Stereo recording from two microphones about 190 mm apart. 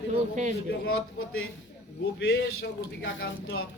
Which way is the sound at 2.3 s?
85° left.